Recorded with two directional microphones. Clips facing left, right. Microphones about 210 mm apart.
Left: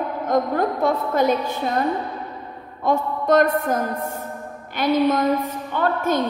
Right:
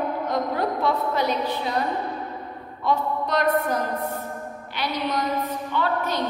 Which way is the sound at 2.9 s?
50° left (ahead or behind).